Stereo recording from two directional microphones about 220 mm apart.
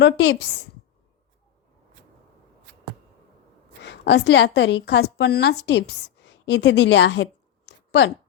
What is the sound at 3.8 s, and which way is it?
A woman's voice, 50° left (ahead or behind).